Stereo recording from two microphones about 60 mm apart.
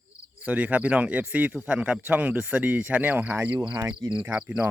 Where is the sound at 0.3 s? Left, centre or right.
Right.